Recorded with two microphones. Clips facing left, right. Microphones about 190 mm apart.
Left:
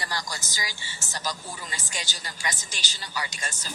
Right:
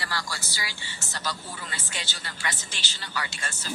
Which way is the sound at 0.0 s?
20° left (ahead or behind).